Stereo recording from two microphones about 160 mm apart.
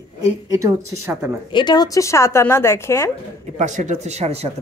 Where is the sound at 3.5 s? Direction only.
50° right (ahead or behind).